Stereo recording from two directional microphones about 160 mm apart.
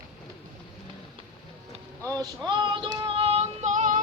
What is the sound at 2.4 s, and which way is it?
Music, 30° right (ahead or behind).